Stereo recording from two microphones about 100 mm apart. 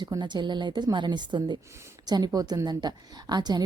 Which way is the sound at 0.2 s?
50° right (ahead or behind).